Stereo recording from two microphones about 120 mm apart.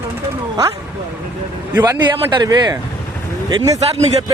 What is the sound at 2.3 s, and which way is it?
Speech, 35° right (ahead or behind).